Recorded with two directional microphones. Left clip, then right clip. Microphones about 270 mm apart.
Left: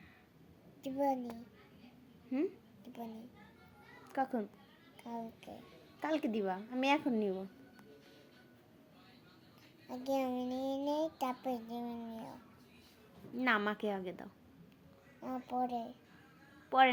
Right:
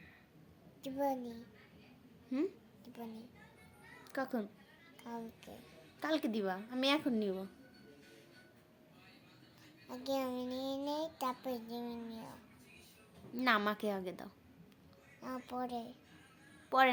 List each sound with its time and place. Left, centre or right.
0.8 s a child's voice: centre
2.3 s a woman's voice: centre
4.1 s a woman's voice: centre
6.0 s a woman's voice: centre
9.9 s a child's voice: centre
13.3 s a child's voice: centre